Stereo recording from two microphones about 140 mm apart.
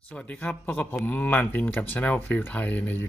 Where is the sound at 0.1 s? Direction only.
10° left (ahead or behind).